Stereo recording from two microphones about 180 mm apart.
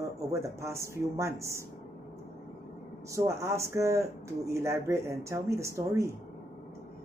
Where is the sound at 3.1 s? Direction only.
15° right (ahead or behind).